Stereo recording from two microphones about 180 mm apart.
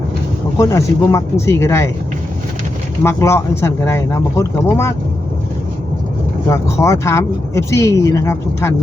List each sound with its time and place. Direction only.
0.5 s speech: 15° left (ahead or behind)
3.0 s speech: 15° left (ahead or behind)
6.5 s speech: 15° left (ahead or behind)